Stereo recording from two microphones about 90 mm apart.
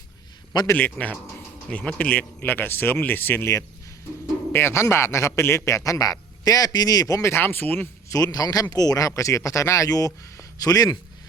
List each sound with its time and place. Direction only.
0.7 s a man's voice: 20° left (ahead or behind)
4.5 s a man's voice: 30° left (ahead or behind)
8.1 s a man's voice: 45° left (ahead or behind)